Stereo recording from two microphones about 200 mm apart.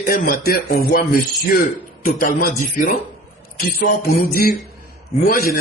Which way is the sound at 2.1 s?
45° left (ahead or behind).